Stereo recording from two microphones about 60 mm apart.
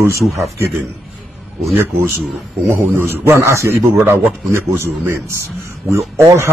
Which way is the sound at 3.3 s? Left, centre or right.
Right.